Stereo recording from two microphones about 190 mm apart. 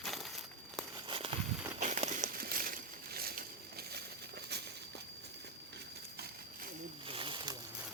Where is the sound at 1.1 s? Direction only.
30° right (ahead or behind); by 3.5 s 50° right (ahead or behind).